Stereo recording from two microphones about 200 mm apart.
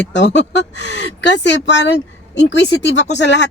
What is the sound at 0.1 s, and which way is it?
Speech, 60° left (ahead or behind).